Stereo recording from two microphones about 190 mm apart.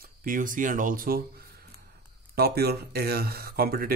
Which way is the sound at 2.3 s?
55° right (ahead or behind).